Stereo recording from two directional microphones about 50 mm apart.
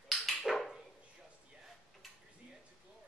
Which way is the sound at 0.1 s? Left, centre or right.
Centre.